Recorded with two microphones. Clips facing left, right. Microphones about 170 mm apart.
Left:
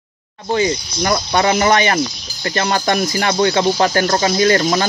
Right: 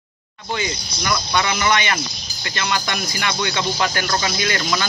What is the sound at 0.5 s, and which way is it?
Speech, 35° left (ahead or behind).